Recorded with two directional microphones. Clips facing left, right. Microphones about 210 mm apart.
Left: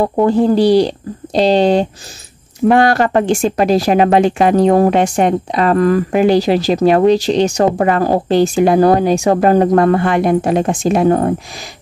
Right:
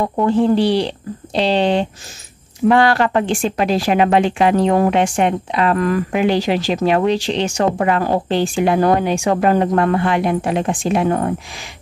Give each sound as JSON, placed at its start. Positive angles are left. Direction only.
{"t": 0.0, "sound": "speech", "side_deg": 35}